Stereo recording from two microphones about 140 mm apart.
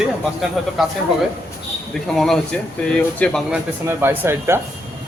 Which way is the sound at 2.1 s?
Centre (ahead or behind).